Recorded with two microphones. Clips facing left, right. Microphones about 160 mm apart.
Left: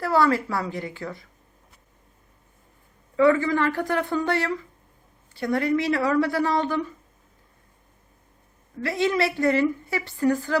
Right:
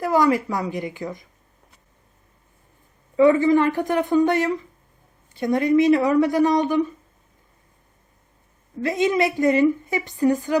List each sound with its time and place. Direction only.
0.0 s a woman's voice: 15° right (ahead or behind)
3.2 s a woman's voice: 20° right (ahead or behind)
8.8 s a woman's voice: 20° right (ahead or behind)